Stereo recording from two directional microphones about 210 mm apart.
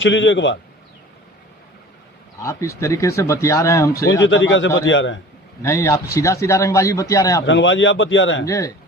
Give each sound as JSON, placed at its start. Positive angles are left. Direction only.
{"t": 0.0, "sound": "speech", "side_deg": 60}
{"t": 2.4, "sound": "speech", "side_deg": 15}
{"t": 4.3, "sound": "speech", "side_deg": 60}
{"t": 5.6, "sound": "speech", "side_deg": 15}
{"t": 7.4, "sound": "speech", "side_deg": 60}
{"t": 8.4, "sound": "speech", "side_deg": 15}